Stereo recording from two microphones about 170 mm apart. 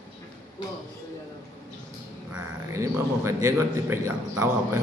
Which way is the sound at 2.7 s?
15° right (ahead or behind).